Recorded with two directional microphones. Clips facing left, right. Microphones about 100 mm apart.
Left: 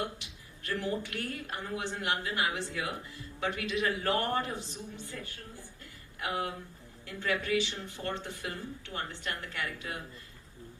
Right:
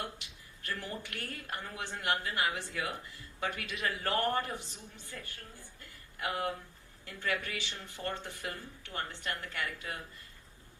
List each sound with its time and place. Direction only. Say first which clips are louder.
0.6 s a woman's voice: left 7 dB; 20° left (ahead or behind)
5.8 s a sound: even; 20° left (ahead or behind)
7.3 s a woman's voice: left 6 dB; 20° left (ahead or behind)